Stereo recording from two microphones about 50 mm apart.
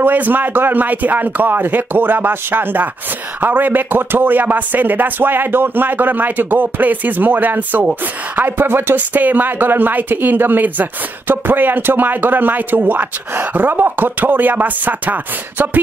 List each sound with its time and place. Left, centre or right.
0.0 s speech: right
8.4 s speech: right